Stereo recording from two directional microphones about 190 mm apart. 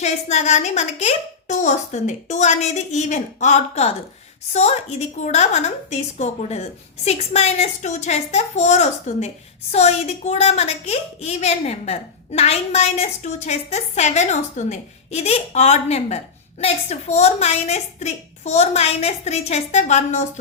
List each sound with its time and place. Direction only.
0.0 s a woman's voice: 35° left (ahead or behind)